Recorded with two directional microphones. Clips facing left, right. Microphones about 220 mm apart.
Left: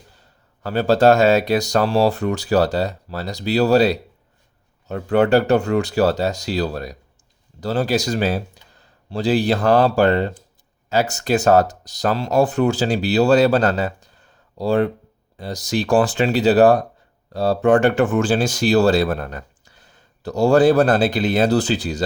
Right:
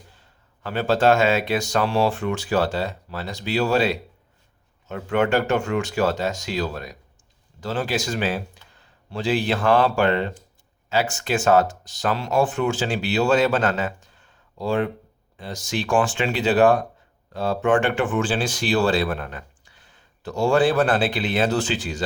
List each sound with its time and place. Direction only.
0.1 s speech: 40° left (ahead or behind)